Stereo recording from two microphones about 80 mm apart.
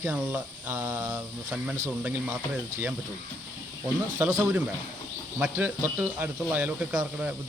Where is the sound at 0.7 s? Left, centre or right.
Right.